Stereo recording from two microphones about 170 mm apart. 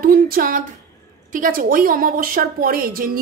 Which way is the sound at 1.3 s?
55° right (ahead or behind).